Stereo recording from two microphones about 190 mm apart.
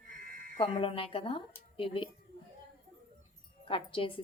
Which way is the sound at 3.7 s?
30° left (ahead or behind).